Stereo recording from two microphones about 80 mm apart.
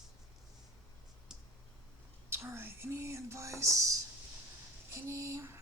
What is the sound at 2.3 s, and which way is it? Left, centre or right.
Speech, right.